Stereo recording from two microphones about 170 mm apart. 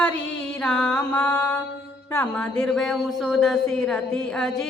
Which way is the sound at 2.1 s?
10° left (ahead or behind).